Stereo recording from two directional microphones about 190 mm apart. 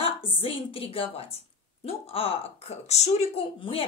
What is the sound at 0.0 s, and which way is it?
A woman's voice, 30° left (ahead or behind).